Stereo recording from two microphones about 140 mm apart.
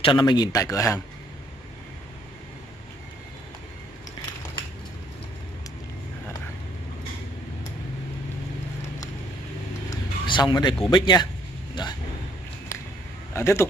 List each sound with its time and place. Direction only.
0.0 s speech: 35° left (ahead or behind)
9.8 s speech: 30° left (ahead or behind)
11.7 s a sound: 30° left (ahead or behind)
13.3 s speech: 20° left (ahead or behind)